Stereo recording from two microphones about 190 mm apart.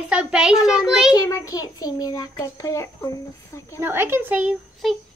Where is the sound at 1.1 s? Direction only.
20° left (ahead or behind).